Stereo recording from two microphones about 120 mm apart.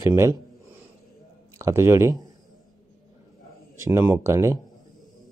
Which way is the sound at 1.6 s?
25° right (ahead or behind).